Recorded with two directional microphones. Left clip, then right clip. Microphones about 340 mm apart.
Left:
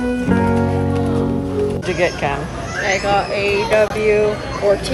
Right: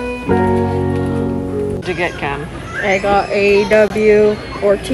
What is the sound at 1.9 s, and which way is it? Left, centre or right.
Speech, centre.